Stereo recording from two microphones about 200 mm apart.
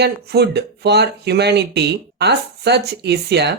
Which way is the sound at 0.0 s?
55° right (ahead or behind).